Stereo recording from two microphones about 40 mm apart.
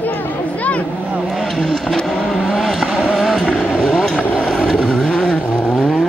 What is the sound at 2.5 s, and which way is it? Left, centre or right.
Vehicle, centre.